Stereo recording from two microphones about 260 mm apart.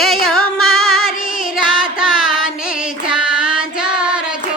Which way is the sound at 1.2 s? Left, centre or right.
Left.